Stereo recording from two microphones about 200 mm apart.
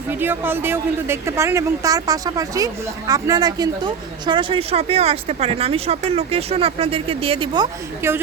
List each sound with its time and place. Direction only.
0.1 s a woman's voice: 10° right (ahead or behind)